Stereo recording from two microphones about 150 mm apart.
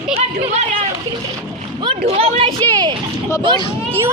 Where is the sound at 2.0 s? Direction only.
45° right (ahead or behind).